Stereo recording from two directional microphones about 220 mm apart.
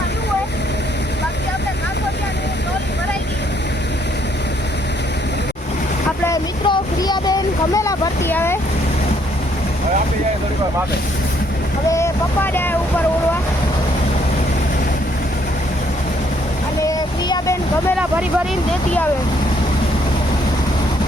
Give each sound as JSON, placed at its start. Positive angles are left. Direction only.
{"t": 6.2, "sound": "boat", "side_deg": 15}
{"t": 11.9, "sound": "speech", "side_deg": 10}
{"t": 16.8, "sound": "boat", "side_deg": 15}